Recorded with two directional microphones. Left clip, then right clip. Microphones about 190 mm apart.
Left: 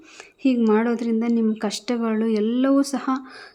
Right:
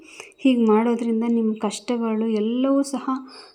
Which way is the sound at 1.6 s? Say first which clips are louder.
Even; 5° left (ahead or behind).